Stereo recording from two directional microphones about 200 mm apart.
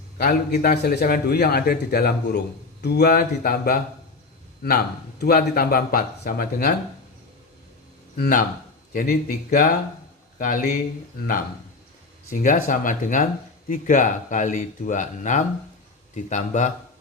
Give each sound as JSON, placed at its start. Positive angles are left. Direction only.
{"t": 0.2, "sound": "a man's voice", "side_deg": 45}
{"t": 5.4, "sound": "a man's voice", "side_deg": 45}
{"t": 8.1, "sound": "a man's voice", "side_deg": 45}